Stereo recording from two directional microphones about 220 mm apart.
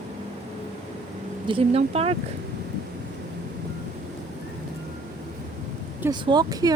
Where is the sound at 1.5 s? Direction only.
25° right (ahead or behind).